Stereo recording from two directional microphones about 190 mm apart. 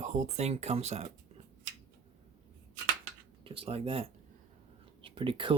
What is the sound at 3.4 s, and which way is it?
Speech, 30° right (ahead or behind).